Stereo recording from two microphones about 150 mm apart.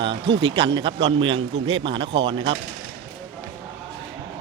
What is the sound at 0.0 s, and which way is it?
Speech, 35° right (ahead or behind).